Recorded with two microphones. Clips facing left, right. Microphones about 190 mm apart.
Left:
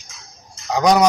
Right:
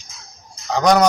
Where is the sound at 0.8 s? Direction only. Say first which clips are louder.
Even; centre (ahead or behind).